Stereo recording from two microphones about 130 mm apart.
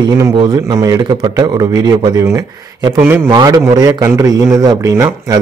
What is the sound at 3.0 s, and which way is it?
Speech, 15° right (ahead or behind).